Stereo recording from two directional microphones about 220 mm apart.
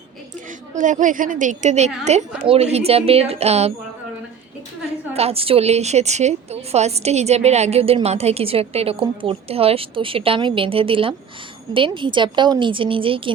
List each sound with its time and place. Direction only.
0.8 s a woman's voice: 35° right (ahead or behind)
5.1 s a woman's voice: 25° right (ahead or behind)